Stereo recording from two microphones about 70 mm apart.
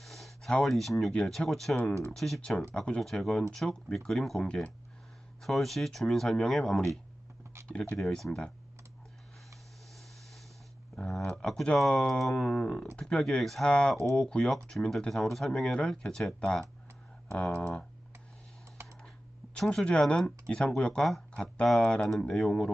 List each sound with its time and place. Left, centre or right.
0.0 s a sound: centre
0.5 s speech: centre
3.0 s speech: centre
4.4 s speech: centre
5.4 s speech: centre
7.7 s speech: centre
7.9 s speech: centre
9.9 s vehicle: centre
10.9 s speech: centre
19.5 s speech: centre